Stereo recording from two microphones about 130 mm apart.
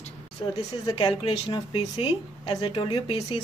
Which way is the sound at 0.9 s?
45° left (ahead or behind).